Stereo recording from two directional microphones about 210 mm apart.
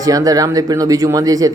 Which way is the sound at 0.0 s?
15° right (ahead or behind).